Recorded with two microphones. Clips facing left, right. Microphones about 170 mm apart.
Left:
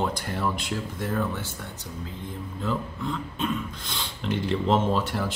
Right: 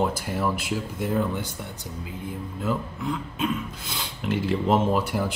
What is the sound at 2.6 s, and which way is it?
Speech, 5° right (ahead or behind).